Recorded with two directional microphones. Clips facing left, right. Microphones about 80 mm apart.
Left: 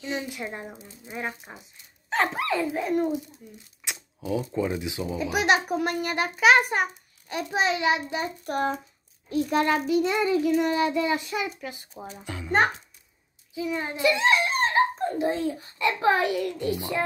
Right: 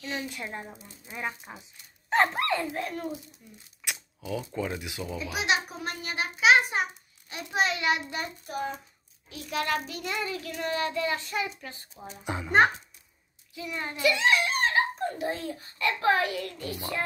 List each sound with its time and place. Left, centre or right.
0.0 s a child's voice: centre
2.0 s speech: centre
2.9 s a child's voice: centre
3.8 s a sound: left
4.5 s a child's voice: centre
5.3 s a child's voice: left
7.5 s a child's voice: left
8.5 s a child's voice: left
9.3 s a child's voice: left
9.8 s a child's voice: centre
12.3 s a child's voice: centre
13.6 s a child's voice: centre
14.2 s a child's voice: left; by 17.0 s centre